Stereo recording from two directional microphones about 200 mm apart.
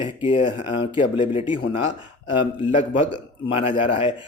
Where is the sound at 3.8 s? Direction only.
25° left (ahead or behind).